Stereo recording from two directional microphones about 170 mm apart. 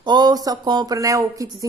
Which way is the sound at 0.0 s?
25° right (ahead or behind).